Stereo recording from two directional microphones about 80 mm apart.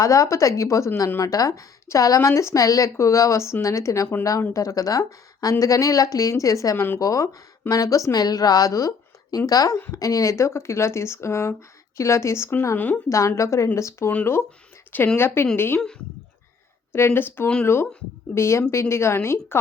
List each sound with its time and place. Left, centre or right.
0.0 s speech: left
13.1 s speech: left
14.9 s speech: left
16.9 s speech: left
18.3 s speech: left